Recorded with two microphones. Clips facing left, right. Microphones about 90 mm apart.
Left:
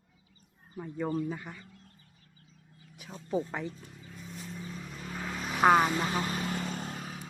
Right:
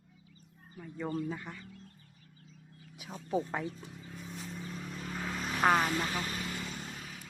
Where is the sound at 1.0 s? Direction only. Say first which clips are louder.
Left 3 dB; 10° left (ahead or behind).